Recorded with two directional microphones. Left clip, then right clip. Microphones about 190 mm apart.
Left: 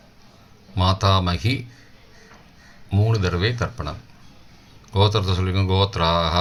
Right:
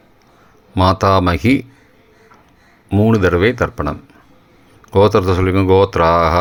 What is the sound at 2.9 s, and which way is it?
Speech, 40° right (ahead or behind).